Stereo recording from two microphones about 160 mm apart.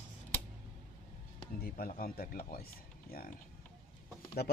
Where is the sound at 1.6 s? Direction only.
70° left (ahead or behind).